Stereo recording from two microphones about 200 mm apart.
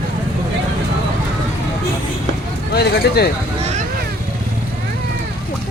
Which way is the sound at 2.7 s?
55° left (ahead or behind).